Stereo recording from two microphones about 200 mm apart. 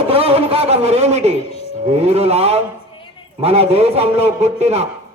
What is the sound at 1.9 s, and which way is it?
A man's voice, 30° right (ahead or behind).